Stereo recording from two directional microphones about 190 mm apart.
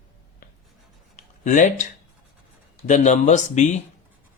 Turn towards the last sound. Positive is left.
turn(degrees=40)  # may be behind; listen again after turning